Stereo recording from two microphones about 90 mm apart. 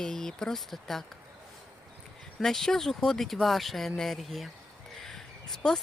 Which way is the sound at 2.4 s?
5° left (ahead or behind).